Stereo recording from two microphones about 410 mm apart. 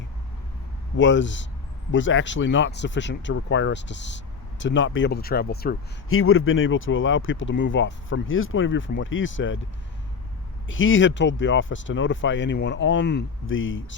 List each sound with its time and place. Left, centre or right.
0.9 s speech: left
10.7 s speech: left